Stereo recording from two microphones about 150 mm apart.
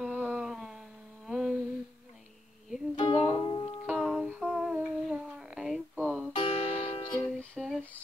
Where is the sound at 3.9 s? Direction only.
Centre (ahead or behind).